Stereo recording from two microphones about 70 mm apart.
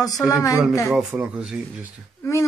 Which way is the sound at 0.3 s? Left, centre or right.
Left.